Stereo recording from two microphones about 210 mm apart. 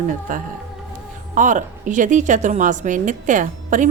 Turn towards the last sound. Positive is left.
turn(degrees=-35)  # may be behind; listen again after turning